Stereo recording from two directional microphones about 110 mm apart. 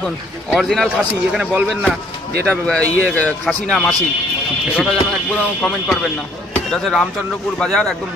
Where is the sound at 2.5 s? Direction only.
10° left (ahead or behind).